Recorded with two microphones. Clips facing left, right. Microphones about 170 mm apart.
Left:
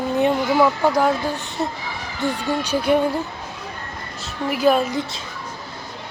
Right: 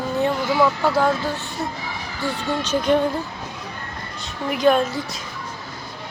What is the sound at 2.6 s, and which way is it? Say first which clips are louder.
Speech: even; 10° left (ahead or behind).